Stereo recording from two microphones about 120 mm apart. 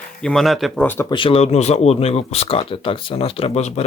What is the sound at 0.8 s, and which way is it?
Speech, 15° left (ahead or behind).